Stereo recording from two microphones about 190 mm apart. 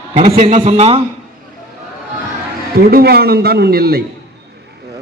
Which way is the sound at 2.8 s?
50° right (ahead or behind).